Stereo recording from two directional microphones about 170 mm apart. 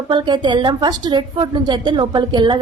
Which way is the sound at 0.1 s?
25° right (ahead or behind).